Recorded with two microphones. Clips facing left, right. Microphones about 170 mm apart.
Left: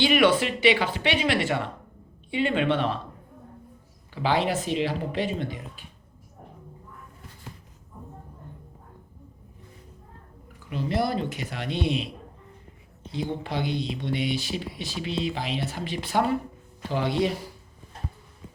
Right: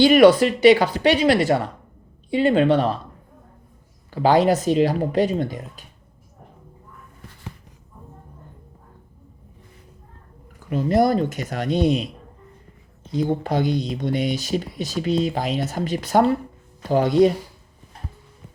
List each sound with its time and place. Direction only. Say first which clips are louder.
0.0 s speech: right 8 dB; 40° right (ahead or behind)
4.1 s speech: right 8 dB; 40° right (ahead or behind)
10.7 s speech: right 8 dB; 45° right (ahead or behind)
13.1 s speech: right 8 dB; 45° right (ahead or behind)